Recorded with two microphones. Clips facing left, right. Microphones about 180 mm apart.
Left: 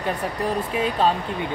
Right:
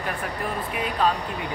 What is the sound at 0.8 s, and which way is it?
Speech, 30° left (ahead or behind).